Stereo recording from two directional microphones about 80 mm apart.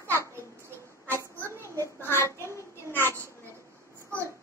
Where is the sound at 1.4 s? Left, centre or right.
Right.